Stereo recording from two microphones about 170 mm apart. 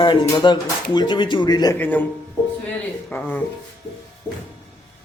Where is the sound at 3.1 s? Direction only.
10° left (ahead or behind).